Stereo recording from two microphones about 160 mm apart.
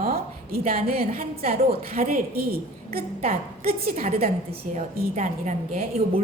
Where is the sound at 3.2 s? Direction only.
40° right (ahead or behind).